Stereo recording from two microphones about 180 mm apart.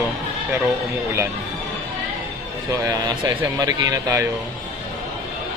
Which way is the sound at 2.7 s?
20° right (ahead or behind).